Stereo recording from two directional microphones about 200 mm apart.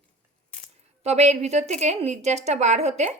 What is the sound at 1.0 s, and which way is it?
A woman's voice, 35° right (ahead or behind).